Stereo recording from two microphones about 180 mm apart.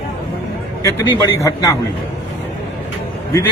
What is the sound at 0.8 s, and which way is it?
Speech, 15° left (ahead or behind).